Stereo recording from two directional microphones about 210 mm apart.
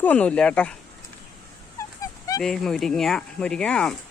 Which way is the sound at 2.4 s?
Centre (ahead or behind).